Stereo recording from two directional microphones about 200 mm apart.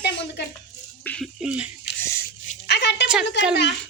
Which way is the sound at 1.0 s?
5° left (ahead or behind).